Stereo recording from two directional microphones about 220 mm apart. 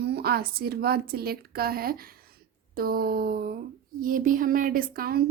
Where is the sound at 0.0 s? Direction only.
45° right (ahead or behind).